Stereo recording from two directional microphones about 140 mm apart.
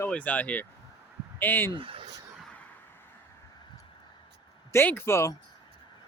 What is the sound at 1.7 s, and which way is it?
Speech, 40° right (ahead or behind).